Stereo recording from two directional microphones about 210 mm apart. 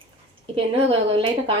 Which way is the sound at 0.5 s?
25° right (ahead or behind).